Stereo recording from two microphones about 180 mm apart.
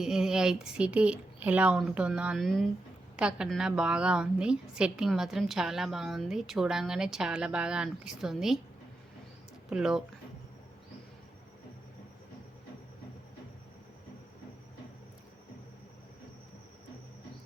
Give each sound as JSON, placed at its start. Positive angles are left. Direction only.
{"t": 0.0, "sound": "a woman's voice", "side_deg": -5}
{"t": 9.6, "sound": "a woman's voice", "side_deg": -5}